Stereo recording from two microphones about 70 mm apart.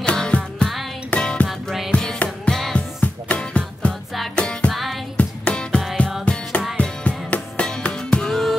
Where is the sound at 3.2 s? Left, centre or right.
Centre.